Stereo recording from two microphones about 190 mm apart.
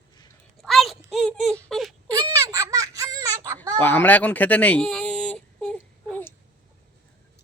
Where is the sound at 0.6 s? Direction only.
Centre (ahead or behind).